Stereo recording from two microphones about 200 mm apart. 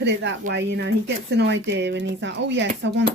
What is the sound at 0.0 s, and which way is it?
A woman's voice, 60° right (ahead or behind).